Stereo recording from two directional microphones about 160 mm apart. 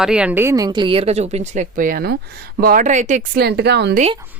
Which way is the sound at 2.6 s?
60° right (ahead or behind).